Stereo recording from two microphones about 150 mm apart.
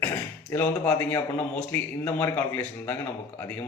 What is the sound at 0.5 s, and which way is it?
Speech, 15° left (ahead or behind).